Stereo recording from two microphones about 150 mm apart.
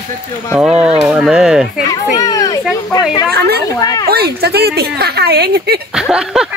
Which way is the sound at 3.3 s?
90° right.